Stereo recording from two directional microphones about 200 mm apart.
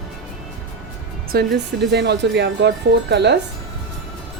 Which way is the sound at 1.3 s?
55° right (ahead or behind).